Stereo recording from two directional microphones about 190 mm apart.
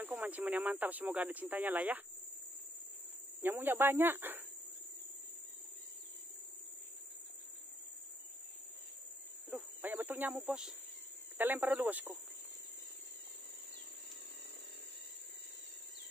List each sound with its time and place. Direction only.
0.0 s speech: 10° right (ahead or behind)
3.4 s speech: 10° right (ahead or behind)
9.5 s a sound: 10° right (ahead or behind)
11.3 s speech: 10° right (ahead or behind)